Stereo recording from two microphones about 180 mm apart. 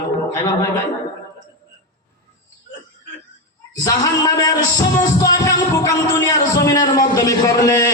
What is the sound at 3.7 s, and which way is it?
Speech, 20° left (ahead or behind).